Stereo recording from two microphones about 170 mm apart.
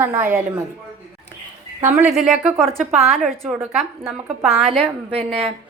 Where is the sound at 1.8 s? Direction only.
15° right (ahead or behind).